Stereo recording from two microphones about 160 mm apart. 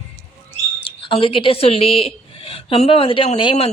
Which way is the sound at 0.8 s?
35° left (ahead or behind).